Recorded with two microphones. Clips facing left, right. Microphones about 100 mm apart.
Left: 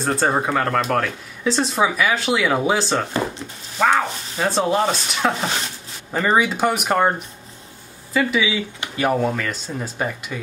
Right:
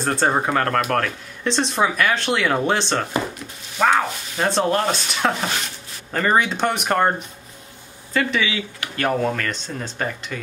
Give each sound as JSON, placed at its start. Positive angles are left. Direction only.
{"t": 0.0, "sound": "speech", "side_deg": 0}
{"t": 8.1, "sound": "speech", "side_deg": 5}